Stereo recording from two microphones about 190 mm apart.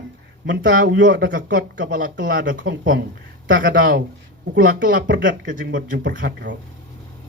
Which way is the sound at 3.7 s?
60° right (ahead or behind).